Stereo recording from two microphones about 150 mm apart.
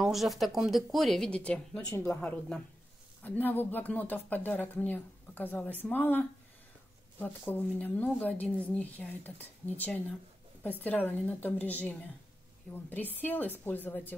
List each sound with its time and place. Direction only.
0.0 s speech: centre (ahead or behind)